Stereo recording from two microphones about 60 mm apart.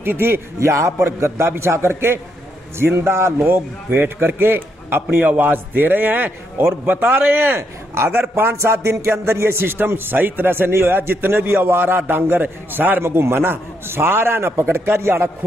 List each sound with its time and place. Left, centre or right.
0.0 s a man's voice: right
0.6 s a man's voice: right
1.0 s a man's voice: right
13.0 s a man's voice: right